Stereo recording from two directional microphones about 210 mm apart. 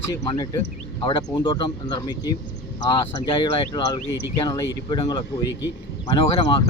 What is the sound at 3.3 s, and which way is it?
Speech, 20° left (ahead or behind).